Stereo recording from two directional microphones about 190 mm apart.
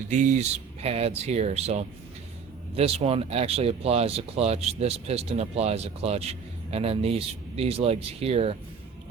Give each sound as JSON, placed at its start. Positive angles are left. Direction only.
{"t": 0.1, "sound": "speech", "side_deg": -40}